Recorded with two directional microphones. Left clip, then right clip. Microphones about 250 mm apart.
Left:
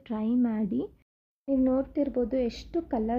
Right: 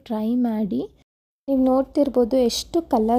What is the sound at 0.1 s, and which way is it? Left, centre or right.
Speech, centre.